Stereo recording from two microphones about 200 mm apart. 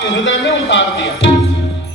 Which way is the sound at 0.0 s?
65° left (ahead or behind).